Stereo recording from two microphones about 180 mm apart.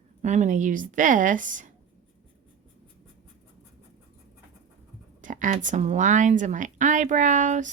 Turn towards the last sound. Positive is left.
turn(degrees=-45)  # may be behind; listen again after turning